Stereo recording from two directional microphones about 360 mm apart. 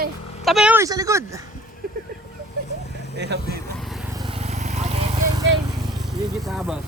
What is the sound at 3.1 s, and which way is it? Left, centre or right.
Speech, right.